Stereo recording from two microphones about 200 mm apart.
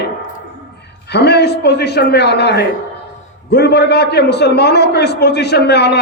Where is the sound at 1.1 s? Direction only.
55° left (ahead or behind).